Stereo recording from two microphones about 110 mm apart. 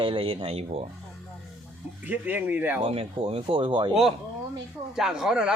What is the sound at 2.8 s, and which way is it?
Speech, 60° right (ahead or behind).